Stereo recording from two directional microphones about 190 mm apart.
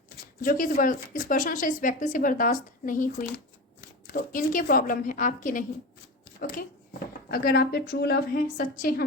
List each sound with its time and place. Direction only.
0.4 s speech: 45° left (ahead or behind)
3.3 s speech: 55° left (ahead or behind)